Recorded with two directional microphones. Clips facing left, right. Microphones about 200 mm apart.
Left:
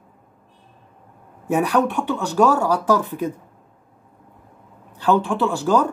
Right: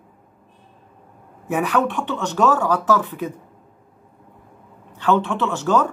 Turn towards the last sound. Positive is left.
turn(degrees=10)  # may be behind; listen again after turning